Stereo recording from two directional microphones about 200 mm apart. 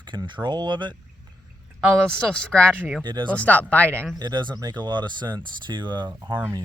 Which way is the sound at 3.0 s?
20° right (ahead or behind).